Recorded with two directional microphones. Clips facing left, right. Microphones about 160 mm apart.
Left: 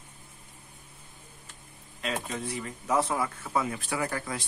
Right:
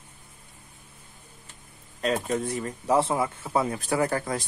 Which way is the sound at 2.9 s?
25° right (ahead or behind).